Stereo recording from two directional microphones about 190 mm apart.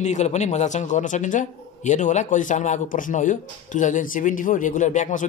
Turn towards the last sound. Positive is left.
turn(degrees=40)  # may be behind; listen again after turning